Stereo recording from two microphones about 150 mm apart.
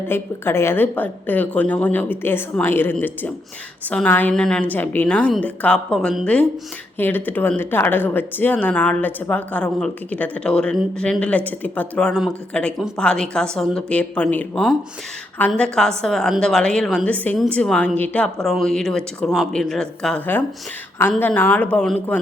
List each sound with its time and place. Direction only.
0.1 s a woman's voice: 15° left (ahead or behind)